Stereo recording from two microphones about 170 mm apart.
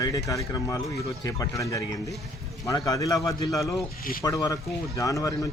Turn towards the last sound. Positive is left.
turn(degrees=20)  # may be behind; listen again after turning